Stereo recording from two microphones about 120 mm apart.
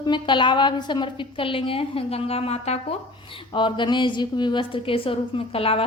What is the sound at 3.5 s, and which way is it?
A woman's voice, 40° left (ahead or behind).